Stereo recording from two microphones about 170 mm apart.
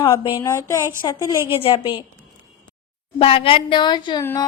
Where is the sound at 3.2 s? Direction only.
35° left (ahead or behind).